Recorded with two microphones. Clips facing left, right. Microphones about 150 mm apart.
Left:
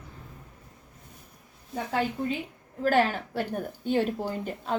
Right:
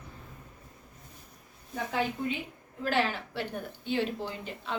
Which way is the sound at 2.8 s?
45° left (ahead or behind).